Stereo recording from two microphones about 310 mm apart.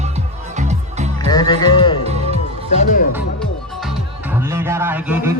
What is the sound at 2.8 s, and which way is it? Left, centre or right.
Music, left.